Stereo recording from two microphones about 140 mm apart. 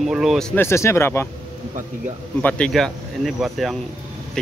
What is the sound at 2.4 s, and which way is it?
A man's voice, 5° left (ahead or behind).